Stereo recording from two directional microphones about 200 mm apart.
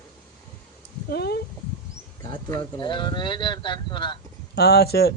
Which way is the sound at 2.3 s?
20° left (ahead or behind).